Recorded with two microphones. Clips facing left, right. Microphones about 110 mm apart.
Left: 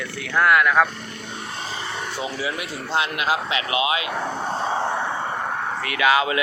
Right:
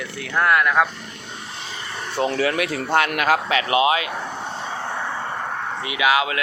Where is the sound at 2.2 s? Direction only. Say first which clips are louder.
Right 10 dB; 65° right (ahead or behind); by 4.0 s 40° right (ahead or behind).